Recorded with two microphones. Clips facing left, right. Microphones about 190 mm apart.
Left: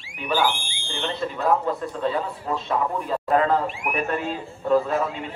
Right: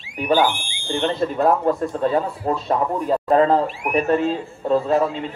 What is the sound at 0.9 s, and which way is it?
A man's voice, 45° right (ahead or behind).